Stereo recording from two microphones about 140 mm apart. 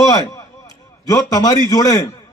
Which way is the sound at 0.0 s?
25° left (ahead or behind).